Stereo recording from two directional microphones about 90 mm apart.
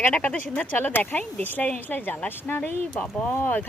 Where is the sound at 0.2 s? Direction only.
20° left (ahead or behind).